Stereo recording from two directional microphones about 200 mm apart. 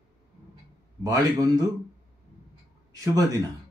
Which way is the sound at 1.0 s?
20° right (ahead or behind).